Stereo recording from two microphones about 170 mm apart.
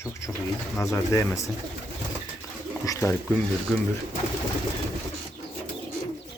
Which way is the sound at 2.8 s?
20° left (ahead or behind).